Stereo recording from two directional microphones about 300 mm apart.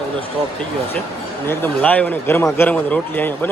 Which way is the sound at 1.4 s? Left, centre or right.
Centre.